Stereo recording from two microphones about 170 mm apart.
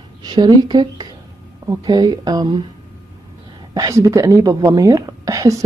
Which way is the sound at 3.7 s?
20° right (ahead or behind).